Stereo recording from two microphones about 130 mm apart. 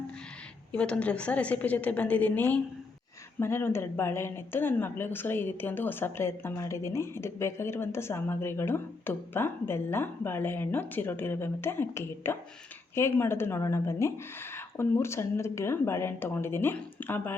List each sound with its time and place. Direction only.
0.7 s speech: 10° left (ahead or behind)